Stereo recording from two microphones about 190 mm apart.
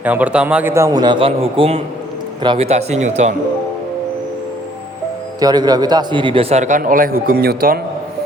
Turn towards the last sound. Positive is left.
turn(degrees=-50)  # may be behind; listen again after turning